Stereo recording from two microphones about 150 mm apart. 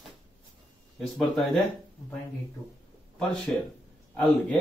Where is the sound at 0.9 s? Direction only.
Centre (ahead or behind).